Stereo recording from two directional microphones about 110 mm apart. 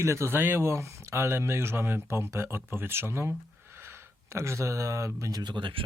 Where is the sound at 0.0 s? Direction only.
25° right (ahead or behind).